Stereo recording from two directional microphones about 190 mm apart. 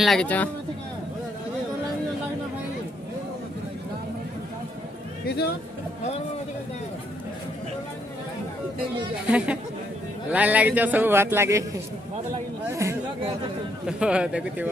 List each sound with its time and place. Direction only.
0.0 s speech: 5° left (ahead or behind)
5.2 s a man's voice: 60° left (ahead or behind)
9.2 s a man's voice: 5° right (ahead or behind)
13.8 s speech: 5° right (ahead or behind)